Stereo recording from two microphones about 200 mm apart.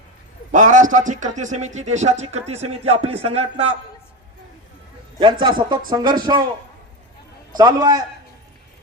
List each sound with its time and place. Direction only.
0.5 s a man's voice: 40° right (ahead or behind)
5.2 s speech: 25° right (ahead or behind)
7.5 s speech: 20° right (ahead or behind)